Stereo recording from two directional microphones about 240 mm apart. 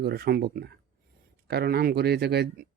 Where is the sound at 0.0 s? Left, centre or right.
Right.